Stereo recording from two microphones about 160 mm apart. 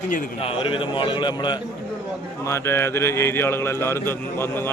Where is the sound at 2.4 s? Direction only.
15° left (ahead or behind).